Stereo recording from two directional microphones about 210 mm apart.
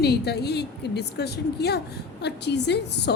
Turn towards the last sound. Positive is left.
turn(degrees=55)  # may be behind; listen again after turning